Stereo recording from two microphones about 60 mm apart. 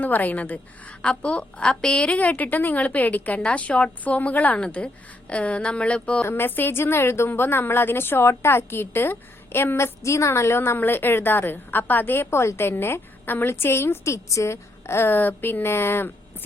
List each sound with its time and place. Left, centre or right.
0.0 s a woman's voice: left
6.2 s a woman's voice: left
10.8 s a woman's voice: left